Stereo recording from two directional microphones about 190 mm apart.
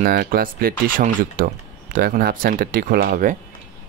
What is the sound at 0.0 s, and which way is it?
Speech, 50° right (ahead or behind).